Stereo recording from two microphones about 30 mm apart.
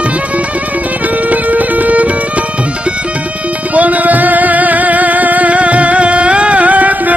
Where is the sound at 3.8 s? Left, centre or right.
Right.